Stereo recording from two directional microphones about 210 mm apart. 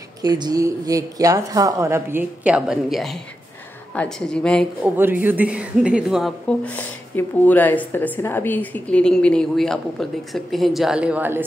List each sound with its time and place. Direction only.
0.2 s a woman's voice: 20° right (ahead or behind); by 4.9 s 5° left (ahead or behind)
4.9 s speech: 10° right (ahead or behind)